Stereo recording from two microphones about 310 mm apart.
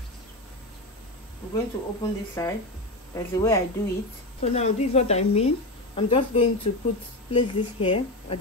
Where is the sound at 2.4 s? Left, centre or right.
Centre.